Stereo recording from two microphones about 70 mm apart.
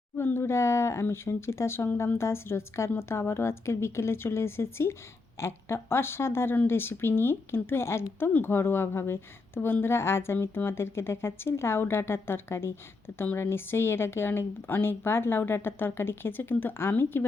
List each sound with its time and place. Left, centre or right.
0.2 s speech: left